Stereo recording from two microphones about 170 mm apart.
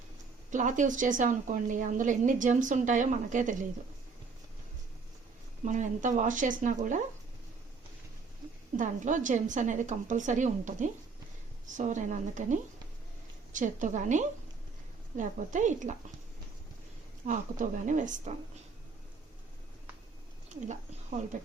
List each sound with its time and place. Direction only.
0.5 s a woman's voice: 45° right (ahead or behind)
5.6 s a woman's voice: 45° right (ahead or behind)
8.7 s a woman's voice: 50° right (ahead or behind)
17.2 s a woman's voice: 50° right (ahead or behind)
20.6 s a woman's voice: 45° right (ahead or behind)